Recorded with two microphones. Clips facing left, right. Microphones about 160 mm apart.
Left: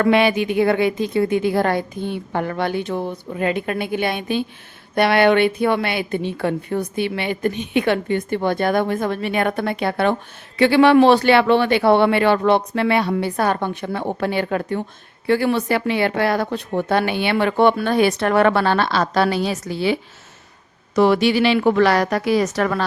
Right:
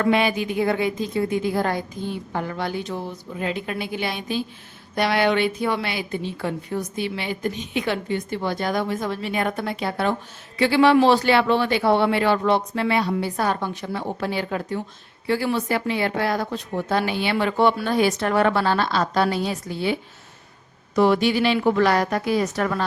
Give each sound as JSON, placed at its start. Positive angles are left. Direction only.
{"t": 0.0, "sound": "a woman's voice", "side_deg": 70}
{"t": 20.9, "sound": "a woman's voice", "side_deg": 80}